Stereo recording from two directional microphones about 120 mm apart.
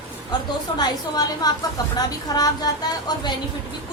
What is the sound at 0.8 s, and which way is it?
A woman's voice, 35° left (ahead or behind).